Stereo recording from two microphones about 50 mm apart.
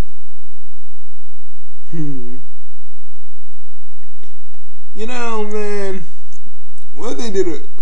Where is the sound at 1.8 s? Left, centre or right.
Centre.